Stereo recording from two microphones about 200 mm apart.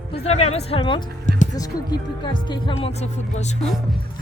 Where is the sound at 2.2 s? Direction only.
25° left (ahead or behind).